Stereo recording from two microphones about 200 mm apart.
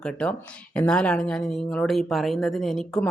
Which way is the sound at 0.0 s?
5° left (ahead or behind).